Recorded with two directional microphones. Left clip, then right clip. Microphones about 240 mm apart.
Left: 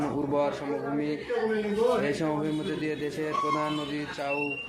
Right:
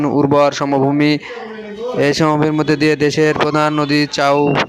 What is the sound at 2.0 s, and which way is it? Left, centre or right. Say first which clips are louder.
Speech: right 15 dB; right.